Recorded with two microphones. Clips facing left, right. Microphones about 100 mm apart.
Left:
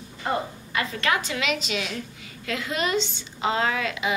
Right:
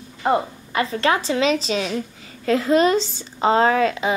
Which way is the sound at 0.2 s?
35° right (ahead or behind).